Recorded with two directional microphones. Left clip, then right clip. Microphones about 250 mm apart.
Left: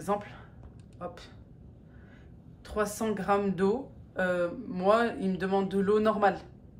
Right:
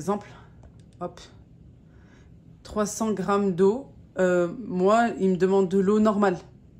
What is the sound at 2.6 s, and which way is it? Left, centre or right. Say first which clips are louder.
Speech: right 3 dB; right.